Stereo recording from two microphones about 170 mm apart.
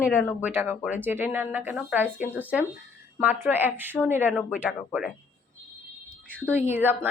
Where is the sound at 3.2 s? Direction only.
10° right (ahead or behind).